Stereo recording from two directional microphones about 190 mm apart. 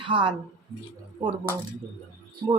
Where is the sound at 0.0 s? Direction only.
25° right (ahead or behind).